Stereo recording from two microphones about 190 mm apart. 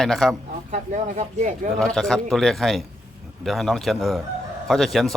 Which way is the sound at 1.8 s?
Centre (ahead or behind).